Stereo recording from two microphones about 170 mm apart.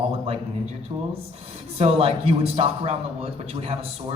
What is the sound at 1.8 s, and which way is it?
A man's voice, 35° right (ahead or behind).